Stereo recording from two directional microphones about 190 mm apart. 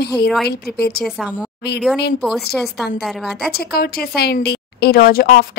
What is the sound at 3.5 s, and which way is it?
A woman's voice, 55° left (ahead or behind).